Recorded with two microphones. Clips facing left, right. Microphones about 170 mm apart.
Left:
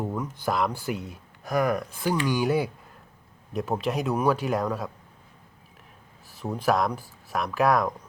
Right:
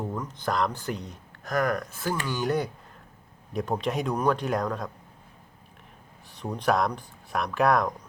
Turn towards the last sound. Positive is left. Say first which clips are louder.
# left 1 dB
turn(degrees=0)  # may be behind; listen again after turning